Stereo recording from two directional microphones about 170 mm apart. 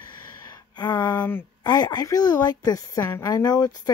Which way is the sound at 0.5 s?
25° left (ahead or behind).